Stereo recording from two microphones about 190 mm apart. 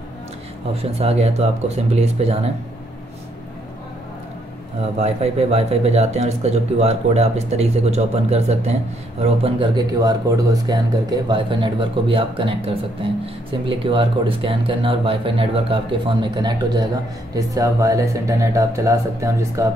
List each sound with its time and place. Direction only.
0.9 s speech: 30° right (ahead or behind)
4.9 s speech: 35° right (ahead or behind); by 19.7 s 15° right (ahead or behind)